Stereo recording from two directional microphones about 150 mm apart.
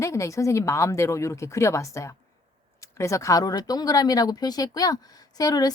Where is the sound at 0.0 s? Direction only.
20° left (ahead or behind).